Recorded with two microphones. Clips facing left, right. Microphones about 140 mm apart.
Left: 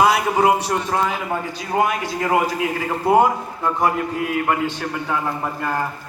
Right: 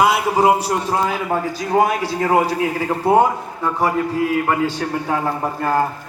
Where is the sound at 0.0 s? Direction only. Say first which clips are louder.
Right 1 dB; 30° right (ahead or behind); by 1.8 s 50° right (ahead or behind).